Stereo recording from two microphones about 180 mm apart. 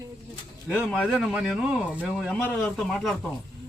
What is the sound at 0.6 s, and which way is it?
Speech, 5° left (ahead or behind).